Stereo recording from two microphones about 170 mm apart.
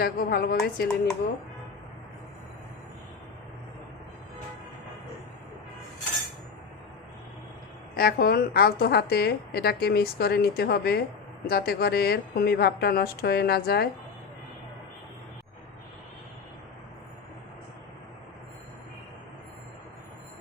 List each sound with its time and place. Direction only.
0.0 s a woman's voice: 60° left (ahead or behind)
7.9 s a woman's voice: 65° left (ahead or behind)